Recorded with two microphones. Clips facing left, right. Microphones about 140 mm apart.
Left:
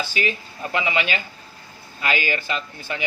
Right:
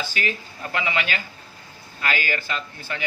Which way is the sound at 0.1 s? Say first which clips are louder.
Left 3 dB; 15° left (ahead or behind).